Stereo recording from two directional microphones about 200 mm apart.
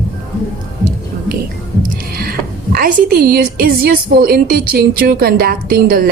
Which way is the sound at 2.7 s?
50° right (ahead or behind).